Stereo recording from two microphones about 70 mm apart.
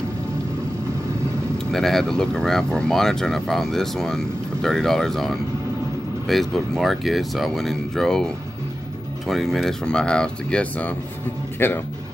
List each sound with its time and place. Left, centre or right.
1.7 s speech: centre
9.3 s speech: centre
9.8 s speech: centre
11.6 s speech: left